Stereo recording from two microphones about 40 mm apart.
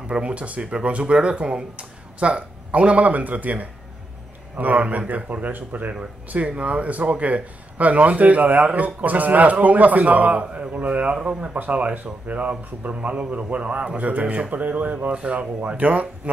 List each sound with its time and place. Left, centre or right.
0.2 s speech: right
6.3 s speech: right
11.5 s speech: right
12.4 s speech: right
13.9 s speech: right